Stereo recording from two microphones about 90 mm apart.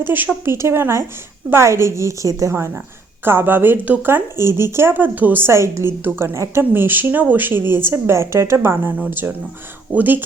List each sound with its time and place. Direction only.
0.0 s a woman's voice: 20° right (ahead or behind)